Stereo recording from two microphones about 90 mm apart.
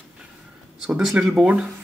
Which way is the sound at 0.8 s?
5° right (ahead or behind).